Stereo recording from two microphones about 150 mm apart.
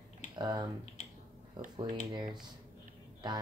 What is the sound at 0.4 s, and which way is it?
Speech, 25° right (ahead or behind).